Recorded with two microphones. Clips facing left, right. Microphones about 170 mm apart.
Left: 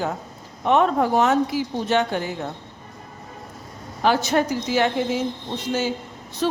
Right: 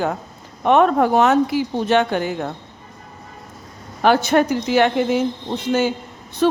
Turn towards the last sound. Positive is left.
turn(degrees=-60)  # may be behind; listen again after turning